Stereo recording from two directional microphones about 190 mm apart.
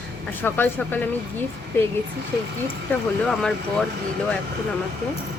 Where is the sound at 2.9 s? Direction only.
10° left (ahead or behind).